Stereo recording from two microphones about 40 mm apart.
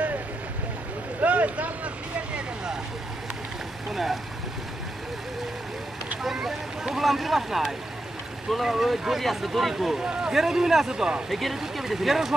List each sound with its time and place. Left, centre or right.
1.2 s vehicle: right
3.9 s speech: centre
6.4 s speech: centre
8.6 s speech: centre
10.9 s speech: right
11.2 s speech: centre